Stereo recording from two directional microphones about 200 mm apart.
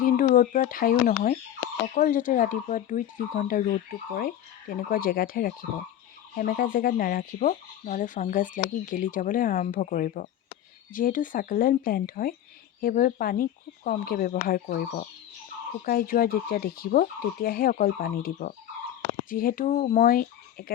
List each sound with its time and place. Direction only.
0.0 s speech: 40° left (ahead or behind)